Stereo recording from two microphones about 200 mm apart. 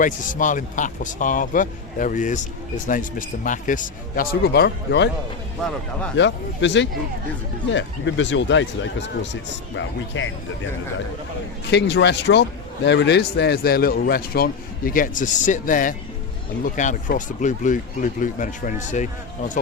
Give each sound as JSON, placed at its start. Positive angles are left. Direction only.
{"t": 0.0, "sound": "a man's voice", "side_deg": 40}
{"t": 6.1, "sound": "speech", "side_deg": 65}
{"t": 11.7, "sound": "a man's voice", "side_deg": 60}